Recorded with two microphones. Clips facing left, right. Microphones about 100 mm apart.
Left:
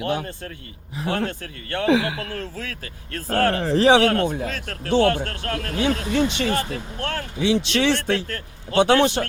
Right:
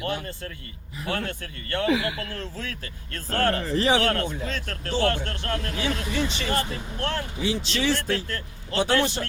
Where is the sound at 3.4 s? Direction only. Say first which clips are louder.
Left 5 dB; 90° left.